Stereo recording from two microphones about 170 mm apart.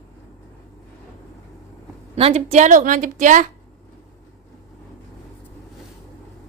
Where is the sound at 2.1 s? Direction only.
40° right (ahead or behind).